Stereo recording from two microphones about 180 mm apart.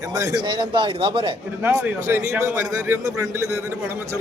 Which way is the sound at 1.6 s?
15° right (ahead or behind).